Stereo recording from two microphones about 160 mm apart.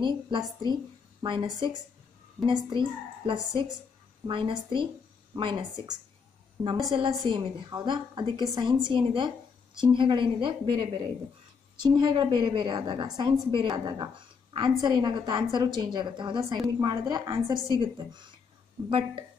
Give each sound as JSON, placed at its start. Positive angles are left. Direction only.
{"t": 0.0, "sound": "a woman's voice", "side_deg": -30}